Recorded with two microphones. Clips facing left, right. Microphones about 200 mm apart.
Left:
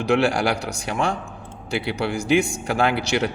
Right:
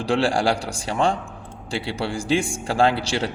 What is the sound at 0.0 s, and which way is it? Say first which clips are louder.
A man's voice: left 1 dB; 30° right (ahead or behind).